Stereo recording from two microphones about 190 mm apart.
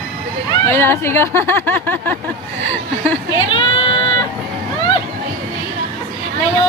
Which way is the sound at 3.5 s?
25° left (ahead or behind).